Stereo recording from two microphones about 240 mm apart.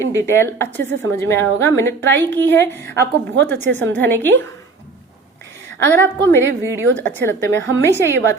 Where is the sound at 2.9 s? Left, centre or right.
Right.